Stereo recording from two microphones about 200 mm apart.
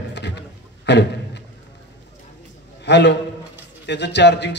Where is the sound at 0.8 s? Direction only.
60° left (ahead or behind).